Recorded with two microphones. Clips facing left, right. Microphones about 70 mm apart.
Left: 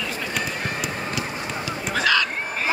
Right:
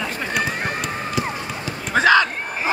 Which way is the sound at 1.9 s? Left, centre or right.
Right.